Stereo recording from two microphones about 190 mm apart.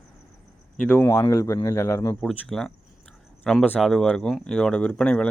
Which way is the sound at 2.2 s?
5° left (ahead or behind).